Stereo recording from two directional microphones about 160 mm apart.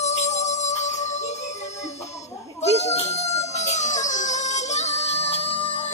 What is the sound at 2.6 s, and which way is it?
Music, 40° left (ahead or behind).